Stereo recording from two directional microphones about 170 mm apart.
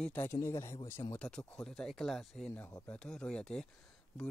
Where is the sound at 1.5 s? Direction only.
5° left (ahead or behind).